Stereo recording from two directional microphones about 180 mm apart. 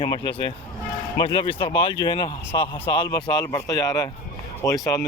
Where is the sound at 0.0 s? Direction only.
30° left (ahead or behind).